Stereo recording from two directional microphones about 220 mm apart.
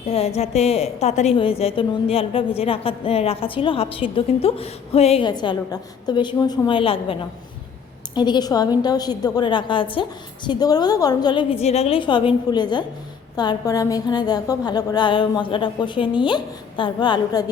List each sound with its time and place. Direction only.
0.0 s a woman's voice: 30° left (ahead or behind)